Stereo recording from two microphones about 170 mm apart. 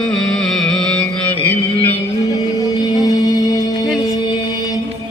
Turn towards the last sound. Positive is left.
turn(degrees=20)  # may be behind; listen again after turning